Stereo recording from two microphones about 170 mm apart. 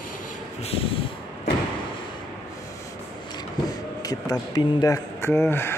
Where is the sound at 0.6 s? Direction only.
35° left (ahead or behind).